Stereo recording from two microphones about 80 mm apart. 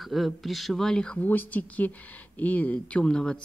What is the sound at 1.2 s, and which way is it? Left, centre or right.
Speech, left.